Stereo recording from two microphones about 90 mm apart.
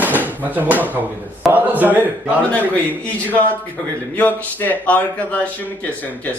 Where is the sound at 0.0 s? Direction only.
20° right (ahead or behind).